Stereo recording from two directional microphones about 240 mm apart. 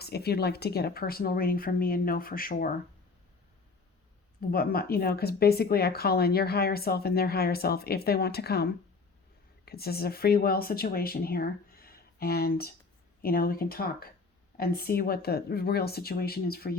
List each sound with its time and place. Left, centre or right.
0.0 s speech: left
4.4 s speech: left